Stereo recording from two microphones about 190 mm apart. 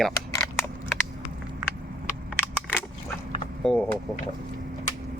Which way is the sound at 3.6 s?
5° left (ahead or behind).